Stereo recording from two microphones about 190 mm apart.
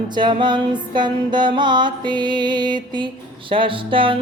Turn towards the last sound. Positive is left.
turn(degrees=-25)  # may be behind; listen again after turning